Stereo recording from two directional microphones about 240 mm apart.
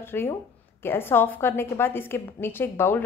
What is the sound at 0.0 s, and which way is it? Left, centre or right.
A woman's voice, centre.